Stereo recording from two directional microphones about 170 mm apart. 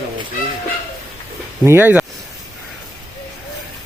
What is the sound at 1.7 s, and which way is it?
Speech, 10° right (ahead or behind).